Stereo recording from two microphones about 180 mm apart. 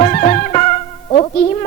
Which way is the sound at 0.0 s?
40° left (ahead or behind).